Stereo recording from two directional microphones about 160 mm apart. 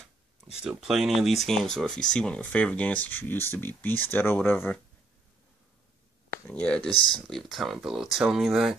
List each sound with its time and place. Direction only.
0.7 s speech: 5° right (ahead or behind)
6.4 s speech: 5° left (ahead or behind)
6.9 s speech: 30° left (ahead or behind)
7.2 s speech: centre (ahead or behind)